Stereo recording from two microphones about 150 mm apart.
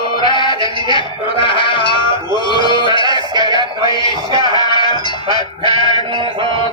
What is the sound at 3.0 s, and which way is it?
Music, 30° right (ahead or behind).